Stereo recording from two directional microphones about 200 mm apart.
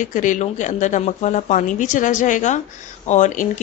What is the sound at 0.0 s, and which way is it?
A woman's voice, 40° left (ahead or behind).